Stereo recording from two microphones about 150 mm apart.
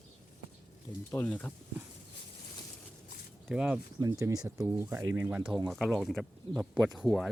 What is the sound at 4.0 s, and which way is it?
Speech, 20° right (ahead or behind).